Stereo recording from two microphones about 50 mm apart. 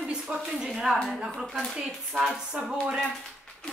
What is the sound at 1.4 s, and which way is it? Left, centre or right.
Speech, centre.